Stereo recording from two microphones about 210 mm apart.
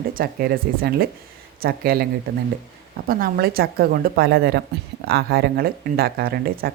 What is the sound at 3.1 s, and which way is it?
Speech, 45° right (ahead or behind).